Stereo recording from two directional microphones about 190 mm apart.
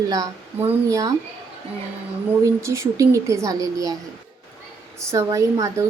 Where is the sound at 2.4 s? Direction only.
15° right (ahead or behind).